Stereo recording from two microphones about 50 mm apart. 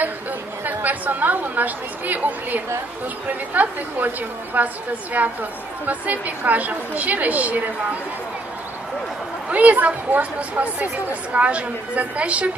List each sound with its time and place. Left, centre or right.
0.7 s a woman's voice: right
9.5 s speech: right